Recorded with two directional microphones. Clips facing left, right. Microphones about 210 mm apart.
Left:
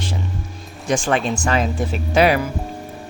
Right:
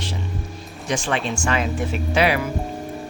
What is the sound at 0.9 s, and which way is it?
Speech, 45° left (ahead or behind).